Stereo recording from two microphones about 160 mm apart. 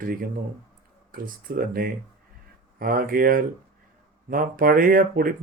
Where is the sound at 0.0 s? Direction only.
65° right (ahead or behind).